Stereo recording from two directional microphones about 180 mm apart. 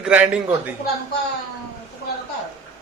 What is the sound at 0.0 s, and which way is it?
Speech, 5° right (ahead or behind).